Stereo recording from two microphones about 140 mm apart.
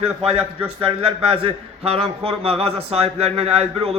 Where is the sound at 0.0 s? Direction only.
45° right (ahead or behind).